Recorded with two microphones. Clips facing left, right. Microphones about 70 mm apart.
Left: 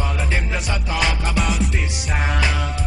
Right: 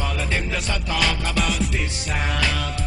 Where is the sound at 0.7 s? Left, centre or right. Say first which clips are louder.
Left 1 dB; centre.